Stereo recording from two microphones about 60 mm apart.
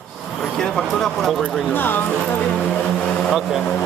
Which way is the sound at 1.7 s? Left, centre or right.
Left.